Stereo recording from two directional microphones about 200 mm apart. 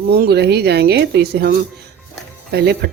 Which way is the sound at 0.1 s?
50° right (ahead or behind).